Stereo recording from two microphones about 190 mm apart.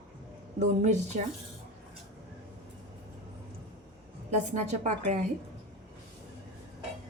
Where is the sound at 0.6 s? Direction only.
40° right (ahead or behind).